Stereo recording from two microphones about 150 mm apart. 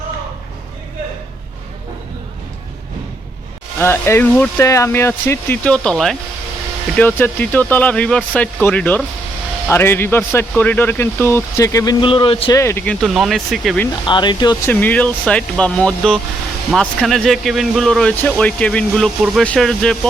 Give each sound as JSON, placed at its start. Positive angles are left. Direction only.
{"t": 3.8, "sound": "speech", "side_deg": 15}
{"t": 12.5, "sound": "speech", "side_deg": 20}
{"t": 14.0, "sound": "speech", "side_deg": 30}
{"t": 14.6, "sound": "speech", "side_deg": 10}